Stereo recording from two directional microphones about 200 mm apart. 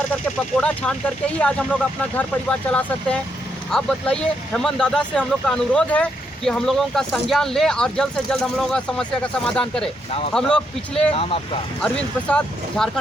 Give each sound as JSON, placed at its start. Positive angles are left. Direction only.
{"t": 0.5, "sound": "speech", "side_deg": 5}
{"t": 11.1, "sound": "speech", "side_deg": 30}
{"t": 11.8, "sound": "speech", "side_deg": 5}